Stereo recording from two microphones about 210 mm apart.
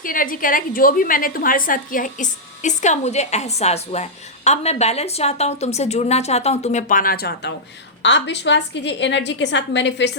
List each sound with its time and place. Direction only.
0.0 s a woman's voice: 40° left (ahead or behind); by 10.1 s 55° left (ahead or behind)